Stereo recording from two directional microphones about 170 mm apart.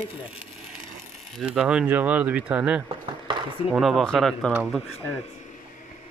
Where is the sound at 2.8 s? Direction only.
25° right (ahead or behind).